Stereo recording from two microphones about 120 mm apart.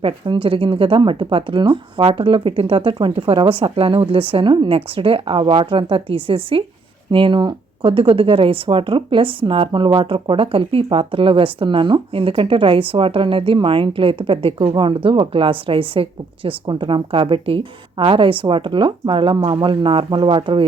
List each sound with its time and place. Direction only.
0.0 s speech: 45° right (ahead or behind)